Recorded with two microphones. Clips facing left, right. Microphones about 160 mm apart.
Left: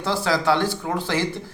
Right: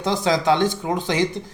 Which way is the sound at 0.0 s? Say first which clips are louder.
Right 2 dB; 20° right (ahead or behind).